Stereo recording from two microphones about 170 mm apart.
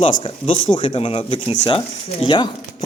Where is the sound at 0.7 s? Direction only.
35° left (ahead or behind).